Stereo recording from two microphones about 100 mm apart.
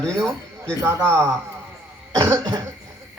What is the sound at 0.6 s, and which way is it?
A man's voice, 30° right (ahead or behind).